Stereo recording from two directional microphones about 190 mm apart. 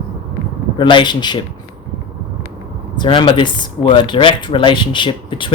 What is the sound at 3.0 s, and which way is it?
Speech, 25° left (ahead or behind).